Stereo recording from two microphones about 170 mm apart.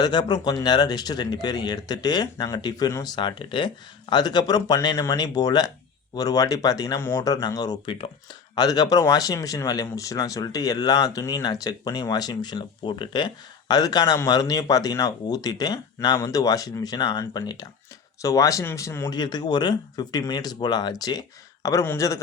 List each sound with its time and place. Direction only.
0.0 s speech: 25° left (ahead or behind)